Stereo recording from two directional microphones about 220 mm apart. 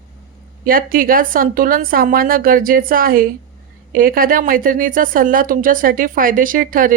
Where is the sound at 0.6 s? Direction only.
40° right (ahead or behind).